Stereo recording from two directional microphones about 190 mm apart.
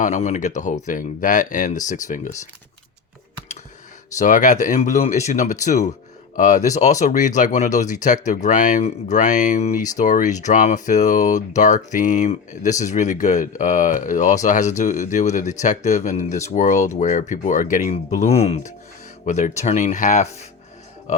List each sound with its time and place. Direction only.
0.0 s speech: 40° left (ahead or behind)
4.2 s speech: 40° left (ahead or behind)